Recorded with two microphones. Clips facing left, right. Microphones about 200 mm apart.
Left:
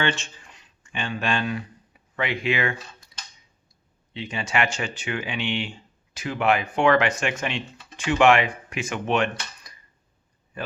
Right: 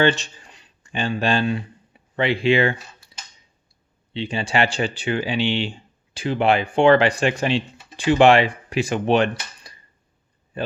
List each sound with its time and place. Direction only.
0.0 s speech: 35° right (ahead or behind)
4.1 s speech: 30° right (ahead or behind)